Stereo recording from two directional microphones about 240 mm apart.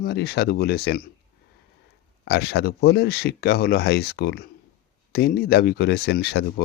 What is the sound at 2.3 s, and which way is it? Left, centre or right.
Speech, left.